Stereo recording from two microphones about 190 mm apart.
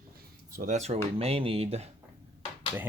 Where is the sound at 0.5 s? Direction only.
40° right (ahead or behind).